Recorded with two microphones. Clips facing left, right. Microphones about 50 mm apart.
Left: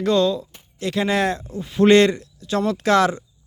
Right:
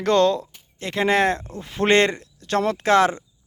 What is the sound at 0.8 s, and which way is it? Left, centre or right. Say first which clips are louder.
Speech: right 1 dB; right.